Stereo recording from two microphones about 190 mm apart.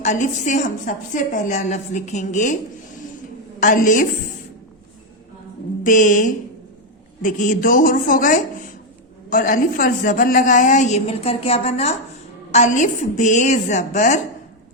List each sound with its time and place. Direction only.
0.0 s a woman's voice: 40° left (ahead or behind)
3.6 s speech: 45° left (ahead or behind)
5.8 s a woman's voice: 45° left (ahead or behind)